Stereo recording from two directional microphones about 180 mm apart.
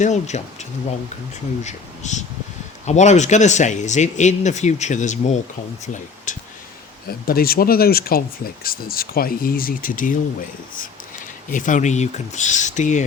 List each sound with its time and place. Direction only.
0.0 s speech: 40° left (ahead or behind)
7.1 s speech: 55° left (ahead or behind)
11.5 s speech: 45° left (ahead or behind)